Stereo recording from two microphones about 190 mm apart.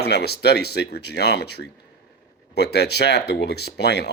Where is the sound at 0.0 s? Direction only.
60° left (ahead or behind).